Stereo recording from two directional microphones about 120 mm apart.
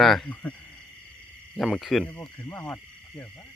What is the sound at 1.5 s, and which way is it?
Speech, centre (ahead or behind).